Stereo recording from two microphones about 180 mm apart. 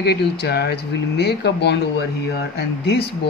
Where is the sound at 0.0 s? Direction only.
65° left (ahead or behind).